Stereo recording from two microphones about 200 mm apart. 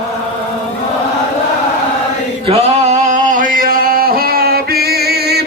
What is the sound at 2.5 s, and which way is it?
Singing, 30° right (ahead or behind).